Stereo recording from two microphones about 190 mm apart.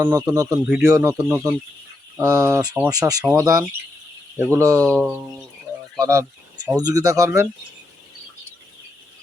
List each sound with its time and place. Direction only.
0.0 s speech: 20° right (ahead or behind)
0.7 s speech: 5° right (ahead or behind)